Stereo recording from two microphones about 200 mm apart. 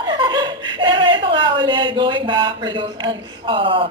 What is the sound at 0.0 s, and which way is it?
Chuckle, 20° right (ahead or behind).